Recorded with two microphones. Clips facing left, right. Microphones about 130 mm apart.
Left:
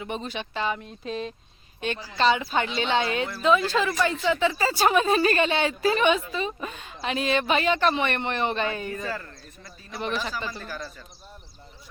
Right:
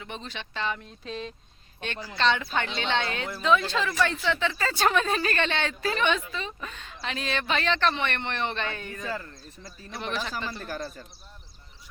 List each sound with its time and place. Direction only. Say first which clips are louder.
0.0 s speech: left 6 dB; 10° left (ahead or behind)
9.0 s speech: left 1 dB; 20° right (ahead or behind)
9.9 s speech: left 3 dB; centre (ahead or behind)